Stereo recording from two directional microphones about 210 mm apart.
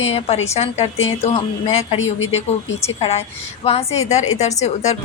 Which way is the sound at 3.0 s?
30° left (ahead or behind).